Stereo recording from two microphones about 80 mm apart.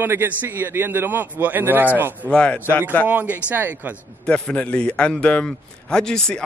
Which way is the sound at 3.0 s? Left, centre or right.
Right.